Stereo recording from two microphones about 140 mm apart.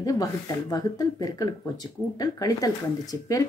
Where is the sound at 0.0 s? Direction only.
25° left (ahead or behind).